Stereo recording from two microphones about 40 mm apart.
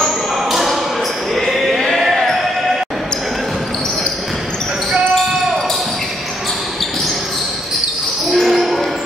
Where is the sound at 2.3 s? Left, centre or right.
Centre.